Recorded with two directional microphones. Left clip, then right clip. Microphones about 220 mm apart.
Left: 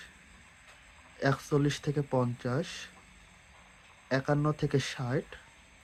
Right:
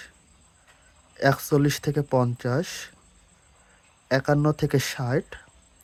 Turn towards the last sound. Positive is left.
turn(degrees=-40)  # may be behind; listen again after turning